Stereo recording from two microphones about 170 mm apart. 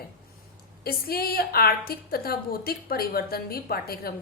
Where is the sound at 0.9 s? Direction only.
65° left (ahead or behind).